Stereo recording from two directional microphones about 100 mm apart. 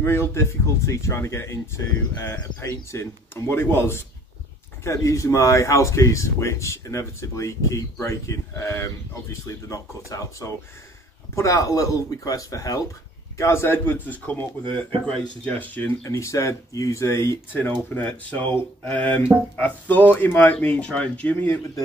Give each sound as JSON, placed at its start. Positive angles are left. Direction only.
{"t": 0.0, "sound": "speech", "side_deg": 25}
{"t": 16.0, "sound": "speech", "side_deg": 30}
{"t": 17.5, "sound": "speech", "side_deg": 20}